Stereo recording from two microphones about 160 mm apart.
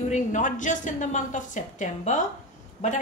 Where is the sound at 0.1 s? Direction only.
50° left (ahead or behind).